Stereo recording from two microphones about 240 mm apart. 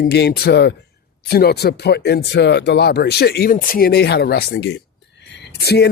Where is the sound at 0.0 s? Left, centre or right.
Left.